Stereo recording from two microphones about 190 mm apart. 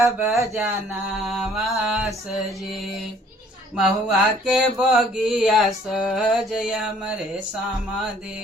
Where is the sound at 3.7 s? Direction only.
5° right (ahead or behind).